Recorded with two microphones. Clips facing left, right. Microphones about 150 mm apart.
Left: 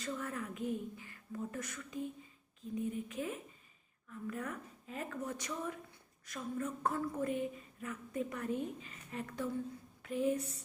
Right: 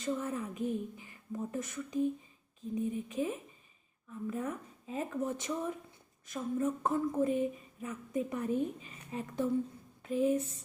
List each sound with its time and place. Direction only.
0.0 s speech: 20° right (ahead or behind)